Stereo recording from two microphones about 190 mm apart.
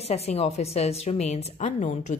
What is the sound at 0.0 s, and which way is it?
A woman's voice, 35° left (ahead or behind).